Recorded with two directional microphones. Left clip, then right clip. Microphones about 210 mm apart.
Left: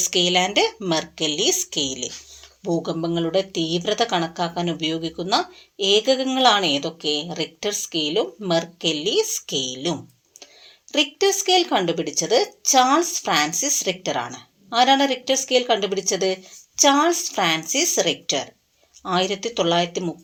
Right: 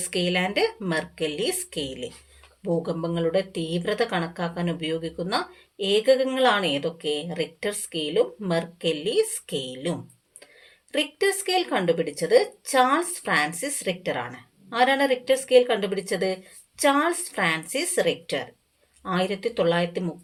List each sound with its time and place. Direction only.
0.0 s a woman's voice: 25° left (ahead or behind)
10.9 s a woman's voice: 25° left (ahead or behind)